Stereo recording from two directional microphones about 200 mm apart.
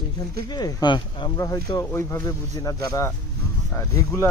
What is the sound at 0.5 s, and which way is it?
Speech, 20° left (ahead or behind).